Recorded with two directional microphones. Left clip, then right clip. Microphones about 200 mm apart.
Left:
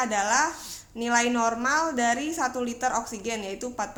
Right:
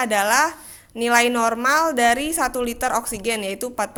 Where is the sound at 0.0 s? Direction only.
40° right (ahead or behind).